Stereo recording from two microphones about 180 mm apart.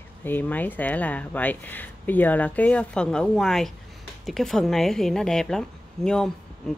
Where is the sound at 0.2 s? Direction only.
10° left (ahead or behind).